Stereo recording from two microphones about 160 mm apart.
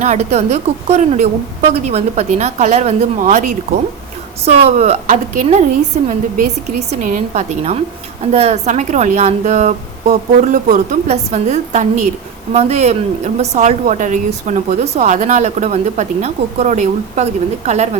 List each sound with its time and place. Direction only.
0.0 s a woman's voice: 45° right (ahead or behind)
4.4 s a woman's voice: 40° right (ahead or behind)